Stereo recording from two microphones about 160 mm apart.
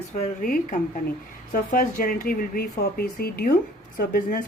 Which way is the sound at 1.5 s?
55° left (ahead or behind).